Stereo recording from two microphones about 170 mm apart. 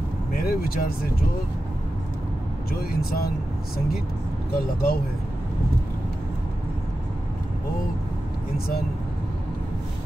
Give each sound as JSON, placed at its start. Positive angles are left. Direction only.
{"t": 0.3, "sound": "speech", "side_deg": 60}
{"t": 2.7, "sound": "speech", "side_deg": 65}
{"t": 8.5, "sound": "speech", "side_deg": 65}